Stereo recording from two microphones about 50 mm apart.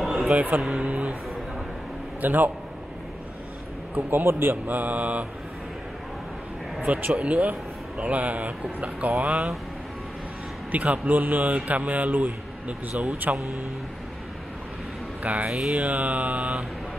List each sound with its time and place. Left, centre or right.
0.1 s music: centre
0.7 s a sound: right
2.2 s speech: right
3.9 s a man's voice: right
4.6 s speech: right
7.1 s speech: right
10.7 s speech: right
15.2 s speech: right